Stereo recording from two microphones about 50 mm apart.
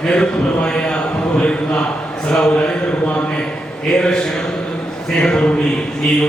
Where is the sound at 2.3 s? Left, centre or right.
Centre.